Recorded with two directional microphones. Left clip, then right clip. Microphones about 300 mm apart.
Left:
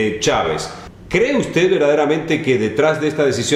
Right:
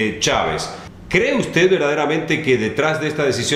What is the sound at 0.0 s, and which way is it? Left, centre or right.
A man's voice, centre.